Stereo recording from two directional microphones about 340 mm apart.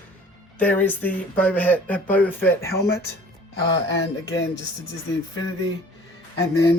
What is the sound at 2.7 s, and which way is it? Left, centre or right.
Speech, left.